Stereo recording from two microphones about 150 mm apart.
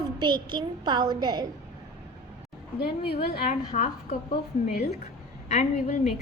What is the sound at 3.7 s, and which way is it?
Speech, 55° left (ahead or behind).